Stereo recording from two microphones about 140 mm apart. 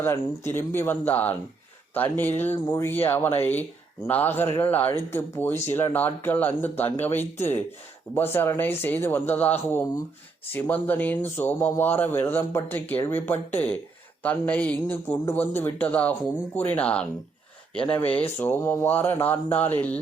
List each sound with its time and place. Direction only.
0.0 s speech: 15° left (ahead or behind)